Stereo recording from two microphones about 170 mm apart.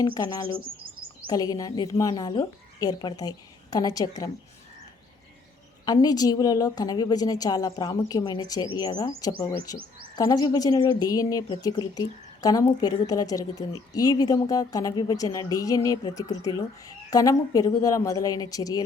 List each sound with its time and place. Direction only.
0.0 s a woman's voice: 25° left (ahead or behind)
5.8 s a woman's voice: 25° left (ahead or behind)